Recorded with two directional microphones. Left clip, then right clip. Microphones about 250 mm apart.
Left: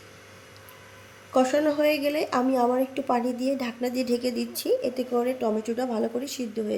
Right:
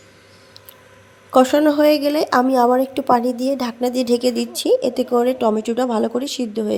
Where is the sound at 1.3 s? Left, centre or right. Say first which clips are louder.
Right 8 dB; right.